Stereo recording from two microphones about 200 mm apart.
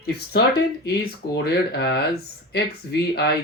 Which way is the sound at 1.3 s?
55° left (ahead or behind).